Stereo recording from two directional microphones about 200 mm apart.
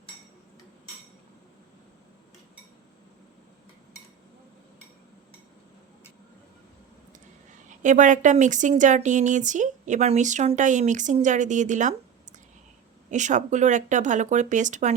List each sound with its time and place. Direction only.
7.8 s a woman's voice: 40° right (ahead or behind)
13.1 s a woman's voice: 35° right (ahead or behind)